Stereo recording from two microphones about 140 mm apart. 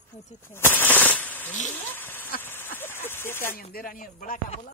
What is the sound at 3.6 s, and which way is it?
Speech, 90° left.